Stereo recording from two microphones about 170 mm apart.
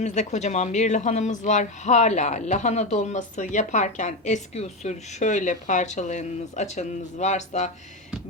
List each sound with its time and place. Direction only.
0.0 s speech: 45° left (ahead or behind)